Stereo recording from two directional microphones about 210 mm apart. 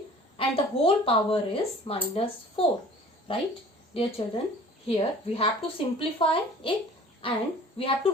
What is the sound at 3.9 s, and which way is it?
A woman's voice, 25° left (ahead or behind).